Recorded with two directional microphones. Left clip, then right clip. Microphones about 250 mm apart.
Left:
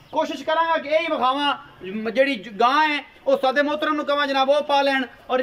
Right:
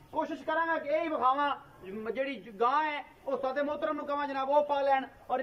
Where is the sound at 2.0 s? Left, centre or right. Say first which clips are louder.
Left 14 dB; left.